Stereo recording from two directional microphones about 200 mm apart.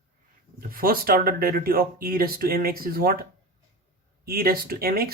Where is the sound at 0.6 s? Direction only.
45° right (ahead or behind).